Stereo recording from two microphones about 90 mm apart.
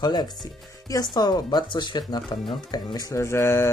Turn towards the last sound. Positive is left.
turn(degrees=30)  # may be behind; listen again after turning